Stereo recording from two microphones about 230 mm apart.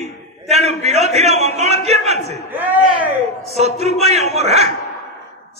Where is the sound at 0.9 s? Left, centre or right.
Right.